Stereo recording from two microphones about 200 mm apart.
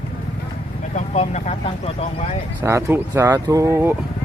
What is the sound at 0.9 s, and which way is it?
Vehicle, 35° left (ahead or behind).